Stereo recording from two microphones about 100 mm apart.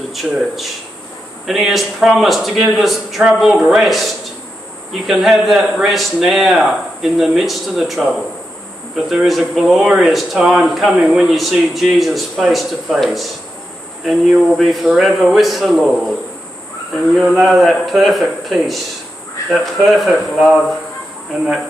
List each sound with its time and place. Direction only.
0.1 s speech: centre (ahead or behind)